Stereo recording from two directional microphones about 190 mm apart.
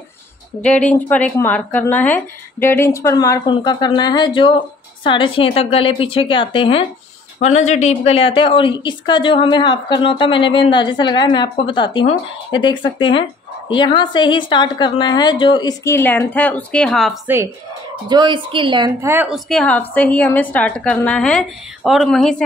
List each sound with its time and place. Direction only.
0.6 s a woman's voice: 5° left (ahead or behind)
18.0 s speech: 25° right (ahead or behind)
18.9 s a woman's voice: 10° right (ahead or behind)
19.3 s speech: 5° left (ahead or behind)